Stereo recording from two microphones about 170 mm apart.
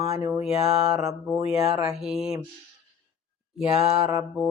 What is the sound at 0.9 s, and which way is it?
Mantra, 20° right (ahead or behind).